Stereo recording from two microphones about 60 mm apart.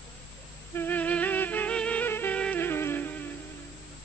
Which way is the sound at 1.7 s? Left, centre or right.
Centre.